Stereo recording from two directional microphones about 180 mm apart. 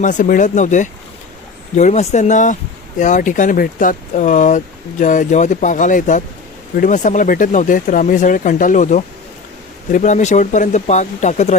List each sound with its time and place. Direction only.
0.0 s speech: 45° left (ahead or behind)